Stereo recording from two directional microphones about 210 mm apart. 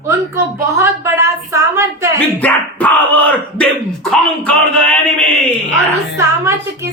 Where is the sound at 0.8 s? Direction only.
15° right (ahead or behind).